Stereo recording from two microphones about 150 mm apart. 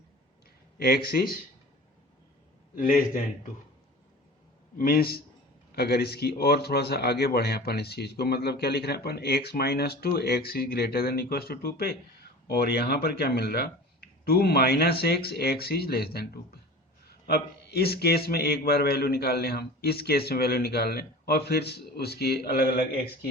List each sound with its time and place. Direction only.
0.8 s a man's voice: 90° left
2.7 s a man's voice: 65° left (ahead or behind)
4.8 s a man's voice: 85° left